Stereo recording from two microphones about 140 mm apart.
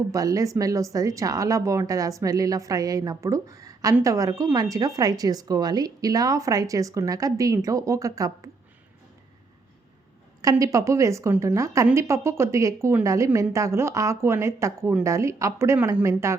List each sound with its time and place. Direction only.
0.1 s speech: 25° right (ahead or behind)
10.4 s speech: 25° right (ahead or behind)